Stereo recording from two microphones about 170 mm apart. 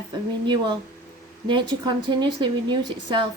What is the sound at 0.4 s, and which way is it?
A woman's voice, 25° right (ahead or behind).